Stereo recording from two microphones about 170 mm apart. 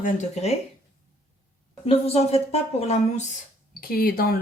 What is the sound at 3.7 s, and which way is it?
Speech, 60° left (ahead or behind).